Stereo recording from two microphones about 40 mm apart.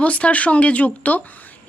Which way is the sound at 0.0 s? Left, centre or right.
Left.